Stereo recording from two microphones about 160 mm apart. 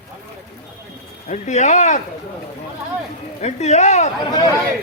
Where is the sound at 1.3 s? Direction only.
45° left (ahead or behind).